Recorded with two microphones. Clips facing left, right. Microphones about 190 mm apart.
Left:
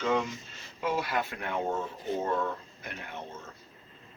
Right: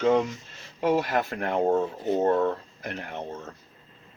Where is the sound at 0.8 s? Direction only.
40° right (ahead or behind).